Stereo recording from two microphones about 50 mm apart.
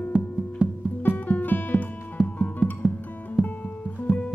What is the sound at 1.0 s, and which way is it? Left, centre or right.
Music, left.